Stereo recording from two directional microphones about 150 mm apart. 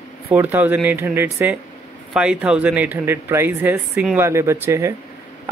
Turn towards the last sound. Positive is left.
turn(degrees=-15)  # may be behind; listen again after turning